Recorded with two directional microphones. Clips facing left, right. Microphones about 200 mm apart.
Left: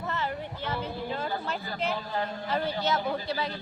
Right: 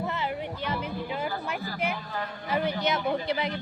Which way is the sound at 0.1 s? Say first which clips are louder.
Right 1 dB; 15° right (ahead or behind).